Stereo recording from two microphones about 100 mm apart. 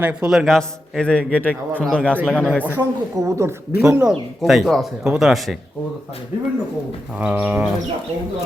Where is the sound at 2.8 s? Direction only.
25° right (ahead or behind).